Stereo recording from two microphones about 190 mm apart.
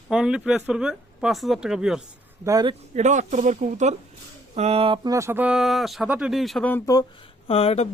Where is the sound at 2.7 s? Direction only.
35° right (ahead or behind); by 6.8 s 5° left (ahead or behind).